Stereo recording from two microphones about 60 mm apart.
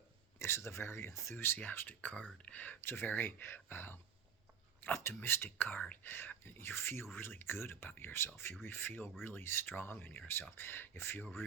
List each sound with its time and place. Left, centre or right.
0.3 s speech: left
1.6 s speech: left
2.8 s speech: left
5.7 s speech: left
6.0 s speech: left
11.2 s speech: left